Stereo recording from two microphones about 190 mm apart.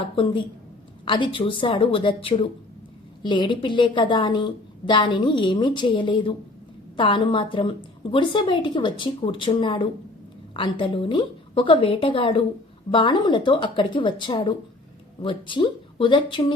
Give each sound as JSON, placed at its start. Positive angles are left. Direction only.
{"t": 1.0, "sound": "a woman's voice", "side_deg": 25}